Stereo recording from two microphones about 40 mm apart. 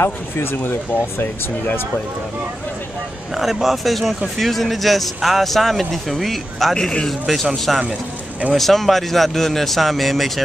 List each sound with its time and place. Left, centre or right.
0.0 s speech: left
3.6 s speech: centre
6.7 s speech: centre
7.1 s speech: centre